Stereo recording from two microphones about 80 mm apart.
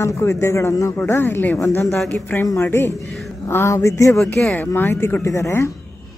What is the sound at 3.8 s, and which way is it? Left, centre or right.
Speech, left.